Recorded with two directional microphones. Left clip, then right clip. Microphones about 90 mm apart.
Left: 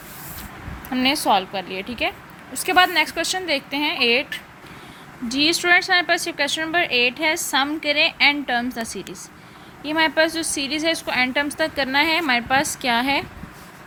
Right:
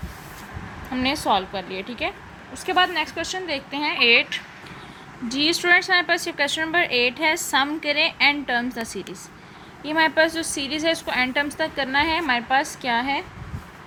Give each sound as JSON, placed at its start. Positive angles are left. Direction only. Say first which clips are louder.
{"t": 0.9, "sound": "a woman's voice", "louder": "left 3 dB", "side_deg": 35}
{"t": 2.5, "sound": "a woman's voice", "louder": "left 4 dB", "side_deg": 70}
{"t": 3.7, "sound": "a woman's voice", "louder": "left 2 dB", "side_deg": 50}
{"t": 3.9, "sound": "speech", "louder": "right 4 dB", "side_deg": 65}
{"t": 5.3, "sound": "a woman's voice", "louder": "left 1 dB", "side_deg": 35}